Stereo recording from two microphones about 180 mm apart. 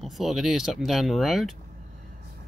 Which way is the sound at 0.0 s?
Centre (ahead or behind).